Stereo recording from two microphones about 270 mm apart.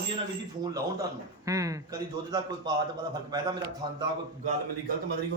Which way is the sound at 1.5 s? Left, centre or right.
Centre.